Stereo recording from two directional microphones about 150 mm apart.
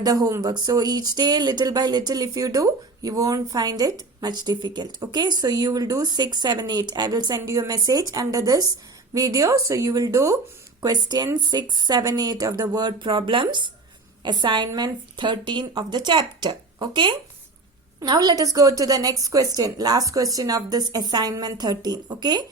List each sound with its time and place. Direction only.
0.0 s speech: 25° right (ahead or behind)